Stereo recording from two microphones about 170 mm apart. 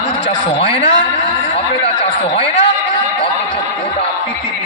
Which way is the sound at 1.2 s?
35° left (ahead or behind).